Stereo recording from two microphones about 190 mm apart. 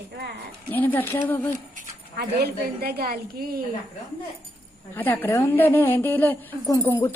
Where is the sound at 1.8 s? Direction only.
50° right (ahead or behind).